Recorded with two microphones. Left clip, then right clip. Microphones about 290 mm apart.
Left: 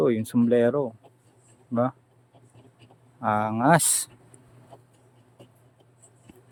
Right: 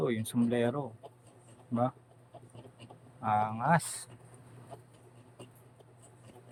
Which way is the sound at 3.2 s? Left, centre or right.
Centre.